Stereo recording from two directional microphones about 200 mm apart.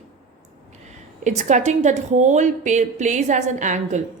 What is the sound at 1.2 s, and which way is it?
A woman's voice, 35° right (ahead or behind).